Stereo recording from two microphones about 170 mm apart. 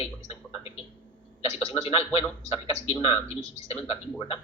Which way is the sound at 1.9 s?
35° left (ahead or behind).